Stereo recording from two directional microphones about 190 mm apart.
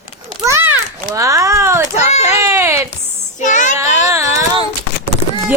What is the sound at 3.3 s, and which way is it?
Child singing, 40° left (ahead or behind).